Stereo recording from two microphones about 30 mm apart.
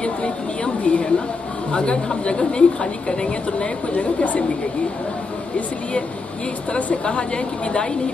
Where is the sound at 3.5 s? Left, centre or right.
Left.